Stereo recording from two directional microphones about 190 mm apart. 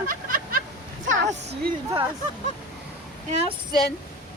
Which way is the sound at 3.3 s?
35° right (ahead or behind).